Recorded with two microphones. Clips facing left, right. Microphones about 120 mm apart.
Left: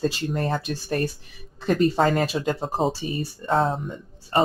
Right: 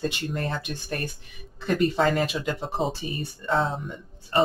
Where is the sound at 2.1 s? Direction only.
40° left (ahead or behind).